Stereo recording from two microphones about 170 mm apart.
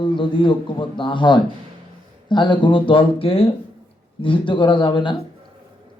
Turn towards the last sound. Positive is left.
turn(degrees=30)  # may be behind; listen again after turning